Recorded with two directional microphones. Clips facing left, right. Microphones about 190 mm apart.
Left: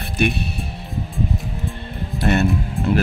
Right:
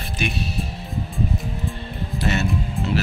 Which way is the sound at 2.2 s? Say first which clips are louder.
Left 5 dB; 55° left (ahead or behind).